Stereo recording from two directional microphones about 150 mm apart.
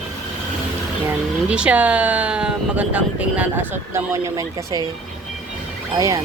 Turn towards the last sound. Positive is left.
turn(degrees=-20)  # may be behind; listen again after turning